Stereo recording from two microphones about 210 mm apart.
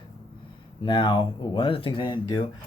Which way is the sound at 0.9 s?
20° left (ahead or behind).